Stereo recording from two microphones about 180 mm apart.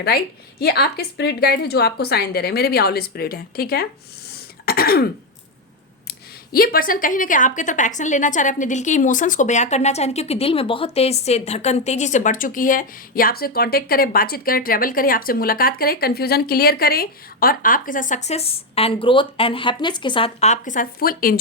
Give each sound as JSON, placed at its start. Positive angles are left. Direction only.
{"t": 0.6, "sound": "a woman's voice", "side_deg": 60}
{"t": 4.3, "sound": "throat clearing", "side_deg": 55}
{"t": 6.1, "sound": "speech", "side_deg": 55}